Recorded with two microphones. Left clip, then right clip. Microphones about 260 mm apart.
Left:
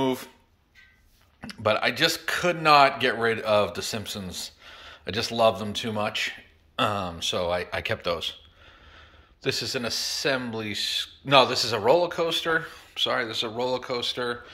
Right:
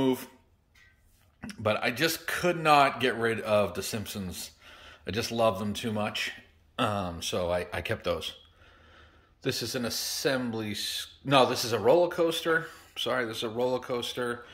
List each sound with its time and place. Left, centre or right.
0.0 s guitar: centre
1.4 s speech: centre